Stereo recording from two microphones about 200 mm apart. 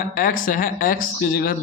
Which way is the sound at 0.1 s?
45° left (ahead or behind).